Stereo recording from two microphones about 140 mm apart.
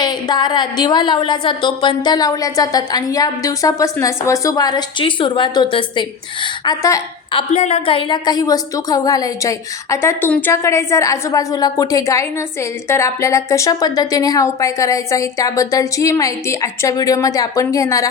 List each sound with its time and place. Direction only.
0.0 s a woman's voice: 30° left (ahead or behind)
7.3 s a woman's voice: 50° left (ahead or behind); by 18.1 s 25° left (ahead or behind)